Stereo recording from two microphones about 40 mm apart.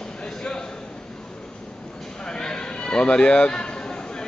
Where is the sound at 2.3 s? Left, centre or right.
Centre.